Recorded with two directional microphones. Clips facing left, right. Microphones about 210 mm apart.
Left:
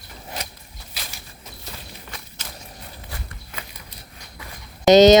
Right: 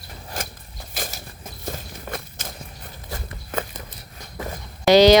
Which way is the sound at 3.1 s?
45° right (ahead or behind).